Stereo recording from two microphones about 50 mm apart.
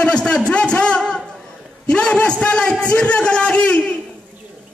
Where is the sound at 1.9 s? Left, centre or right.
Left.